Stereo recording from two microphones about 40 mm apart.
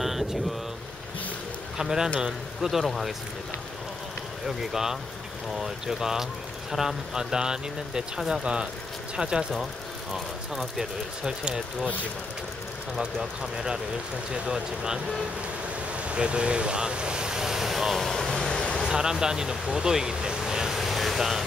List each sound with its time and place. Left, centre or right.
0.0 s vehicle: centre
1.8 s speech: centre
2.7 s speech: centre
4.5 s speech: centre
10.1 s speech: centre
13.0 s speech: centre
16.0 s speech: right; by 17.9 s centre
17.9 s vehicle: centre
18.5 s waves: centre
18.8 s speech: centre